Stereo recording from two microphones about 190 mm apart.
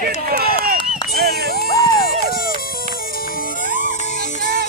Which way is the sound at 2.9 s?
50° left (ahead or behind).